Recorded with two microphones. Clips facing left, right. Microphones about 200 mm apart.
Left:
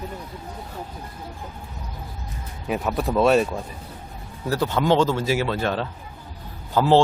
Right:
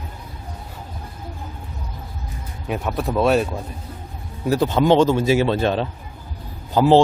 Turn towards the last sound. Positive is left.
turn(degrees=-15)  # may be behind; listen again after turning